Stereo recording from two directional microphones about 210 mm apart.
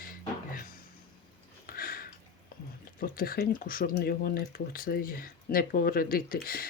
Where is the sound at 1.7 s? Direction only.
45° left (ahead or behind).